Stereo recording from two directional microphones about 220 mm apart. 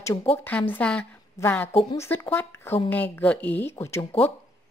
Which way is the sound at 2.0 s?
10° left (ahead or behind).